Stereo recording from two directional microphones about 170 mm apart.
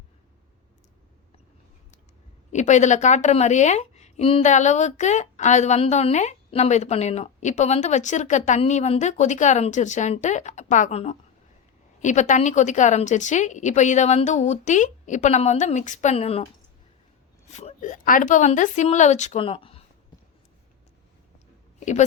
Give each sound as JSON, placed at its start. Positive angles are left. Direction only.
{"t": 2.5, "sound": "a woman's voice", "side_deg": 45}
{"t": 17.5, "sound": "a woman's voice", "side_deg": 40}